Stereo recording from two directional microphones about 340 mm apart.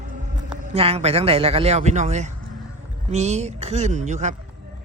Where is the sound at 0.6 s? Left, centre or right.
Centre.